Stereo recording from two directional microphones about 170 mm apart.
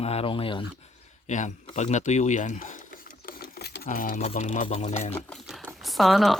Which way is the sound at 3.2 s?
65° left (ahead or behind).